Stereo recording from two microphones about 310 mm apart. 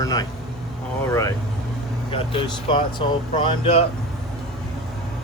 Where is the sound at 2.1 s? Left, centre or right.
Centre.